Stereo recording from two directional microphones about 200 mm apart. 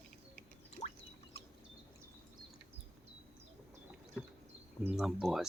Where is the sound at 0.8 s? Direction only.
35° left (ahead or behind).